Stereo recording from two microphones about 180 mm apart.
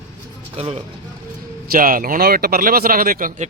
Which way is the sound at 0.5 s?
35° right (ahead or behind).